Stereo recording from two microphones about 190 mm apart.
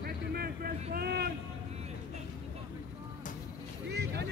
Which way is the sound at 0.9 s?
55° right (ahead or behind).